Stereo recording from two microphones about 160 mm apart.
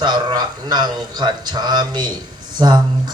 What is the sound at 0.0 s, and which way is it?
Speech, 25° right (ahead or behind).